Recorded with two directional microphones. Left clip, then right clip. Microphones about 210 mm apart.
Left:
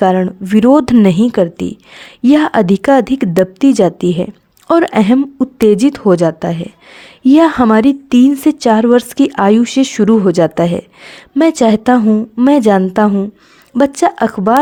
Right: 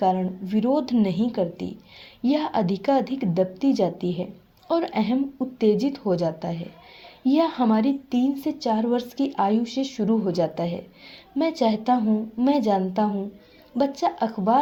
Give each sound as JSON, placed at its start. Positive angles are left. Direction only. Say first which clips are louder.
{"t": 0.0, "sound": "a woman's voice", "louder": "left 11 dB", "side_deg": 50}